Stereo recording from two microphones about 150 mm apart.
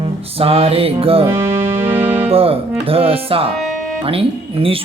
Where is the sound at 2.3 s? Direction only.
40° right (ahead or behind).